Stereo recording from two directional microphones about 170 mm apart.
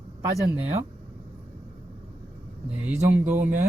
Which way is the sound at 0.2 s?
20° right (ahead or behind).